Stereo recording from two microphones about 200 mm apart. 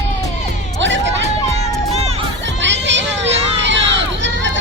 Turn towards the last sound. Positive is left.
turn(degrees=-65)  # may be behind; listen again after turning